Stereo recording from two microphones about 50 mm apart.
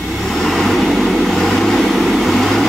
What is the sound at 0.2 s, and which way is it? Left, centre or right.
Vehicle, centre.